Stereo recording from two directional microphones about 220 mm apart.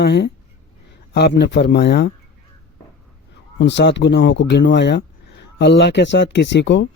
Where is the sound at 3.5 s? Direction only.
55° left (ahead or behind).